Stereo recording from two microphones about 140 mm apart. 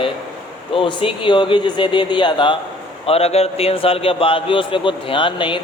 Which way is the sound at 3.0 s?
45° left (ahead or behind).